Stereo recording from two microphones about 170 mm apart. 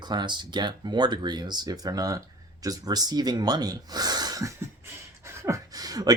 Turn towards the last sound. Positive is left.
turn(degrees=-20)  # may be behind; listen again after turning